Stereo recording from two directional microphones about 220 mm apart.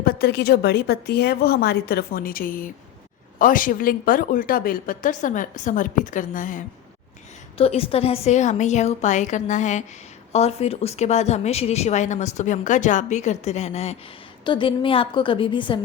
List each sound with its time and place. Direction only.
0.0 s a woman's voice: 45° left (ahead or behind)
7.6 s a woman's voice: 25° left (ahead or behind)